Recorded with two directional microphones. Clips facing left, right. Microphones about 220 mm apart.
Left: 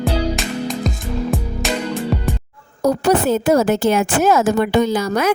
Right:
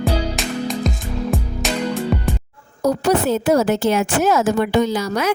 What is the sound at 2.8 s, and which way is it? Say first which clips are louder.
A woman's voice: left 2 dB; 50° left (ahead or behind).